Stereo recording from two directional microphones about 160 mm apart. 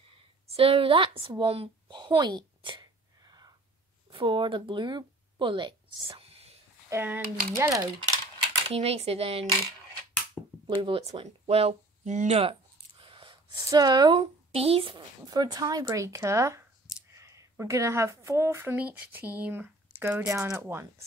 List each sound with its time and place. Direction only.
0.5 s a sound: 35° right (ahead or behind)
4.1 s speech: 30° right (ahead or behind)
6.9 s speech: 15° right (ahead or behind)
8.6 s speech: 40° right (ahead or behind)
10.4 s finger snapping: 5° left (ahead or behind)
10.8 s speech: 35° right (ahead or behind); by 20.8 s 15° right (ahead or behind)